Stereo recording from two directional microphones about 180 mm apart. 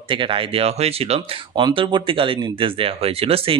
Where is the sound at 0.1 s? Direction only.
30° right (ahead or behind).